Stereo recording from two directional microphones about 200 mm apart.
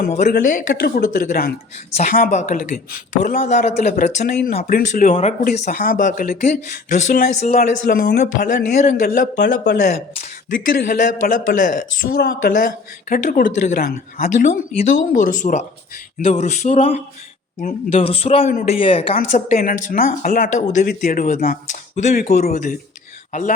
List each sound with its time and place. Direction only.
0.3 s speech: 45° left (ahead or behind); by 19.1 s 25° left (ahead or behind)
19.1 s speech: 40° left (ahead or behind)